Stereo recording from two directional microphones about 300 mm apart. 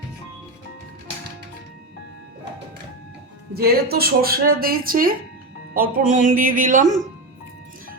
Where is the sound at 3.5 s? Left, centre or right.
Right.